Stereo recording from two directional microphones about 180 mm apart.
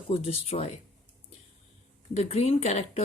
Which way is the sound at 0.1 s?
35° left (ahead or behind).